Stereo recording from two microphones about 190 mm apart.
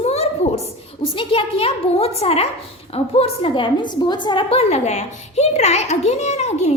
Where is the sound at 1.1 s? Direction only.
30° left (ahead or behind).